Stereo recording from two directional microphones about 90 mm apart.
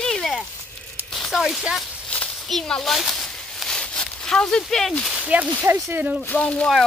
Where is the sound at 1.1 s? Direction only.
5° left (ahead or behind).